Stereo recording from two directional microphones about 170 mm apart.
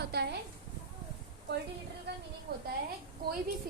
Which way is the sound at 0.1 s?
70° right (ahead or behind).